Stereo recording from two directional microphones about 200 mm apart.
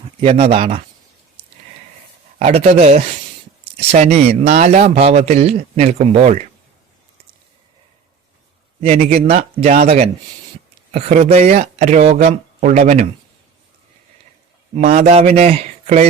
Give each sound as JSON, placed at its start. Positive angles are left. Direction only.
{"t": 0.2, "sound": "speech", "side_deg": -30}
{"t": 2.4, "sound": "a man's voice", "side_deg": -30}
{"t": 8.8, "sound": "a man's voice", "side_deg": -30}
{"t": 14.8, "sound": "a man's voice", "side_deg": -35}